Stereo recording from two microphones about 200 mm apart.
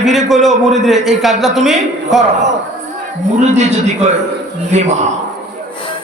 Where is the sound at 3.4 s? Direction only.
35° right (ahead or behind).